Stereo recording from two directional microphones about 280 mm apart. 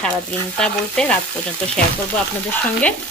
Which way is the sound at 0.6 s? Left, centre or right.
Centre.